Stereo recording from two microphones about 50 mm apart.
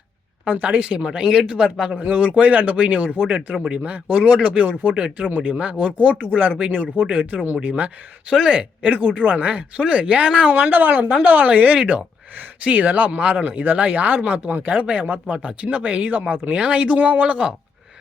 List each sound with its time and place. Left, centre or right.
0.4 s a woman's voice: right
8.3 s speech: centre
8.5 s speech: right
10.5 s a woman's voice: right